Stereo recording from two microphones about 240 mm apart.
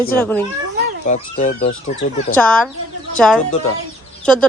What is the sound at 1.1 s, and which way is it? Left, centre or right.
Speech, left.